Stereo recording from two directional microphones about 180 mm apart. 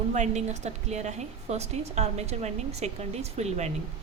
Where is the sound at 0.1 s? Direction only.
40° right (ahead or behind).